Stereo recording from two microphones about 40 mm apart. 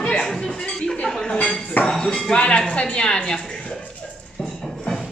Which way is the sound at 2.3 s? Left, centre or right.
Left.